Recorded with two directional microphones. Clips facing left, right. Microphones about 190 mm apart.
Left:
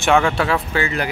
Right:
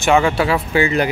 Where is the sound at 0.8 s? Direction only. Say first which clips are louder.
Right 6 dB; 20° right (ahead or behind).